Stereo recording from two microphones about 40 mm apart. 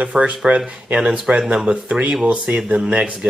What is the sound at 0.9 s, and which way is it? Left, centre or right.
Speech, right.